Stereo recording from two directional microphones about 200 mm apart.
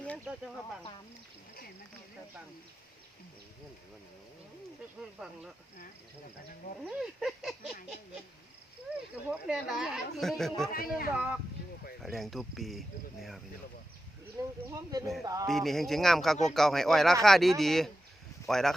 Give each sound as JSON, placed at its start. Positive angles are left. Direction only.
{"t": 4.9, "sound": "speech", "side_deg": -5}
{"t": 6.8, "sound": "speech", "side_deg": 0}
{"t": 8.9, "sound": "speech", "side_deg": -5}
{"t": 10.7, "sound": "a man's voice", "side_deg": 45}
{"t": 11.1, "sound": "speech", "side_deg": -5}
{"t": 14.7, "sound": "speech", "side_deg": -20}
{"t": 15.4, "sound": "speech", "side_deg": 0}